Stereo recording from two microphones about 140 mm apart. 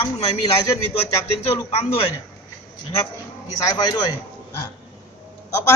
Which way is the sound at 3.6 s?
25° left (ahead or behind).